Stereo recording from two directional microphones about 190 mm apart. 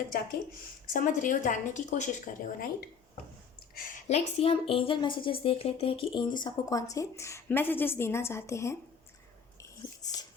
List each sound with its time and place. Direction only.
0.9 s speech: 45° left (ahead or behind)
3.8 s a woman's voice: 40° left (ahead or behind); by 8.8 s 15° left (ahead or behind)
9.6 s whispering: 20° left (ahead or behind)